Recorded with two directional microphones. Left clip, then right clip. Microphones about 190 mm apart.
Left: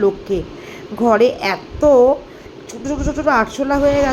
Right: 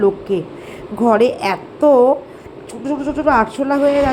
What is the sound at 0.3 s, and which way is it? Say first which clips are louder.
Speech: right 1 dB; 5° right (ahead or behind).